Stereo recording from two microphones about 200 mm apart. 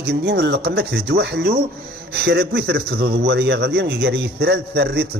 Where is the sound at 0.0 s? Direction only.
50° right (ahead or behind).